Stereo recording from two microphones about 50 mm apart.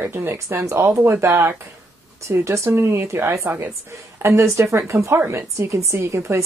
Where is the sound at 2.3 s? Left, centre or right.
Right.